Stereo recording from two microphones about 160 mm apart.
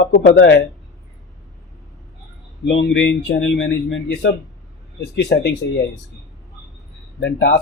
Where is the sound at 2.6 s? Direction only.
90° left.